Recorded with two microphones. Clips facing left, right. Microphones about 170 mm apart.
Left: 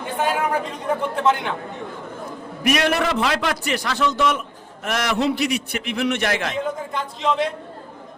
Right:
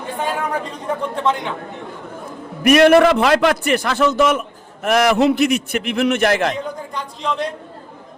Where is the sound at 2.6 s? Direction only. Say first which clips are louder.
Right 10 dB; 55° right (ahead or behind).